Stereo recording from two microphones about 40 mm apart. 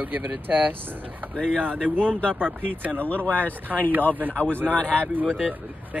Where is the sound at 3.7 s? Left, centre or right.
Right.